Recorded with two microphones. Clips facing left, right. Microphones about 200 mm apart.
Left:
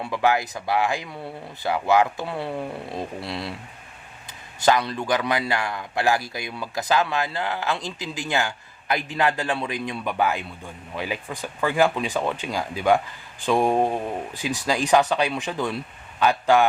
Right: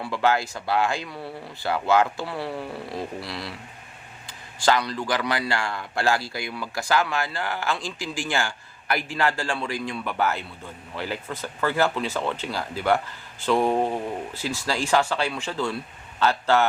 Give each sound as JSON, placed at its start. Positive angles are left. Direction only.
{"t": 0.0, "sound": "speech", "side_deg": 15}